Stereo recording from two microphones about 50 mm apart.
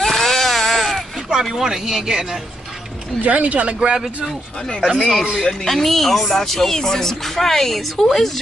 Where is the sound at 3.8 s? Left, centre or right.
Centre.